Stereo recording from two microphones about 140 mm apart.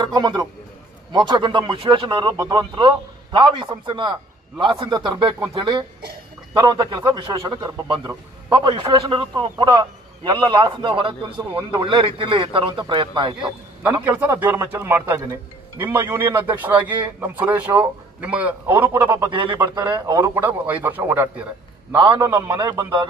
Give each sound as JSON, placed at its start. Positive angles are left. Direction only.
{"t": 0.0, "sound": "a man's voice", "side_deg": -30}
{"t": 14.0, "sound": "a man's voice", "side_deg": -10}
{"t": 19.7, "sound": "a man's voice", "side_deg": -30}
{"t": 20.3, "sound": "a man's voice", "side_deg": -10}
{"t": 21.9, "sound": "a man's voice", "side_deg": -35}
{"t": 22.2, "sound": "a man's voice", "side_deg": -20}